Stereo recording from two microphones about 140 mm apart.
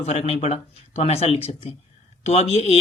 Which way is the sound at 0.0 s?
50° left (ahead or behind).